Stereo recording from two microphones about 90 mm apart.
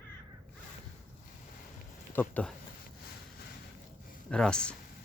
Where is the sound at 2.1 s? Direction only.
15° left (ahead or behind).